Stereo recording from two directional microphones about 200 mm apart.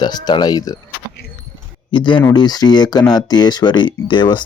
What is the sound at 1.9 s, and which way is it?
Speech, 25° left (ahead or behind).